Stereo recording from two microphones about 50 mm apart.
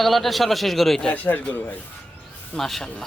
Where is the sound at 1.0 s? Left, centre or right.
Left.